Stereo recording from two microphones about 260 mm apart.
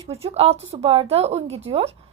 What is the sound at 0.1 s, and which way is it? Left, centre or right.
A woman's voice, right.